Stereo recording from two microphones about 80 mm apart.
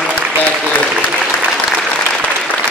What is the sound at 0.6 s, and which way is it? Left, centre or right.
Applause, centre.